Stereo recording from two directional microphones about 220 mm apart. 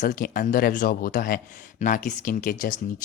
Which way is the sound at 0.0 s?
40° left (ahead or behind).